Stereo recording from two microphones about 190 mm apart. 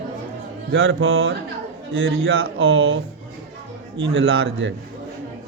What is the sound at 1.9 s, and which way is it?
A man's voice, 75° right (ahead or behind).